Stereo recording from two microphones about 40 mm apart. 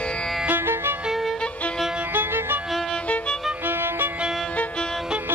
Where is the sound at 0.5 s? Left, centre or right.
Right.